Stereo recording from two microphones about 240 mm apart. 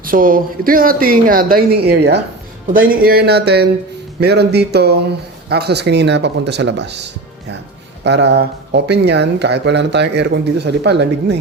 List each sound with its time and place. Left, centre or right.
0.0 s speech: right